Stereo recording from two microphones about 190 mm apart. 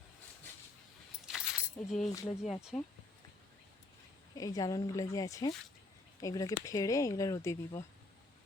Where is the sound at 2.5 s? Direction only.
5° right (ahead or behind).